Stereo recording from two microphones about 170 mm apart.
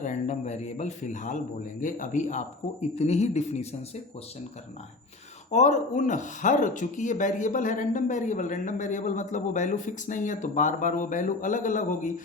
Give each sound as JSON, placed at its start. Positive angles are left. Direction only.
{"t": 0.0, "sound": "a man's voice", "side_deg": 45}
{"t": 5.5, "sound": "speech", "side_deg": 45}